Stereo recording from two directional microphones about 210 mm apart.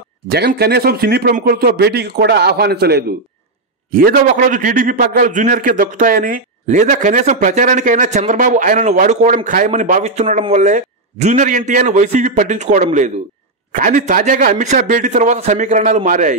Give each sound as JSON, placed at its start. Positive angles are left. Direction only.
{"t": 0.3, "sound": "a man's voice", "side_deg": -50}